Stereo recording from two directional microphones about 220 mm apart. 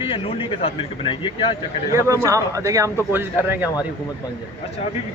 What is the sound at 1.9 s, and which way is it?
A man's voice, 15° right (ahead or behind).